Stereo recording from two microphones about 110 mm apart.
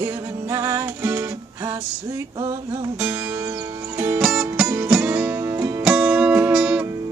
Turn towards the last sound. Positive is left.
turn(degrees=-5)  # may be behind; listen again after turning